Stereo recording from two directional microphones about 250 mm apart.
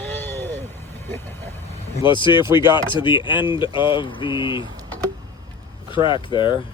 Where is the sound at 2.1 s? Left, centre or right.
Centre.